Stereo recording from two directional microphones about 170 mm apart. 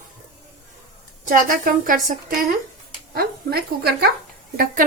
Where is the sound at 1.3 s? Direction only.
55° right (ahead or behind).